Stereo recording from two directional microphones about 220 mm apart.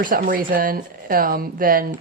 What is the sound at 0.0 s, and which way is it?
Speech, 40° right (ahead or behind).